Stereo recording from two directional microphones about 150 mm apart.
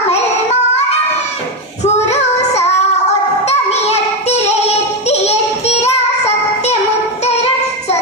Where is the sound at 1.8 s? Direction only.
50° left (ahead or behind).